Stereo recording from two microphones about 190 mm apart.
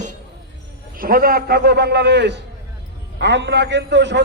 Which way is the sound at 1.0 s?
50° right (ahead or behind).